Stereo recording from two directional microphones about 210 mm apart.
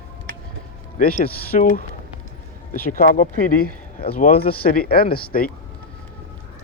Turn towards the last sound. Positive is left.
turn(degrees=45)  # may be behind; listen again after turning